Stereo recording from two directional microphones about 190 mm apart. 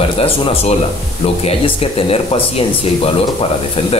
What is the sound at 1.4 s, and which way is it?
Speech, 30° left (ahead or behind).